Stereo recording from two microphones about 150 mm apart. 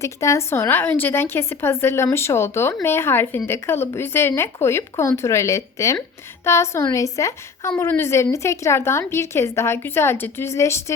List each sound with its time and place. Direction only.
0.0 s a woman's voice: 20° left (ahead or behind)